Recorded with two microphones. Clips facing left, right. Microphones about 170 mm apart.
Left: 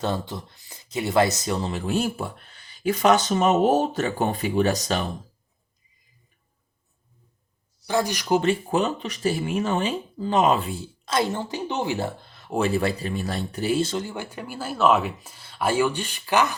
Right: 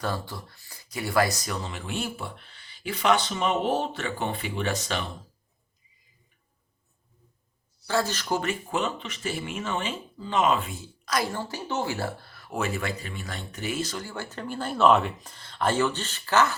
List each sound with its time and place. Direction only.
0.0 s speech: 20° left (ahead or behind); by 5.0 s 40° left (ahead or behind)
7.9 s speech: 15° left (ahead or behind)
8.4 s speech: 30° left (ahead or behind); by 16.6 s 15° left (ahead or behind)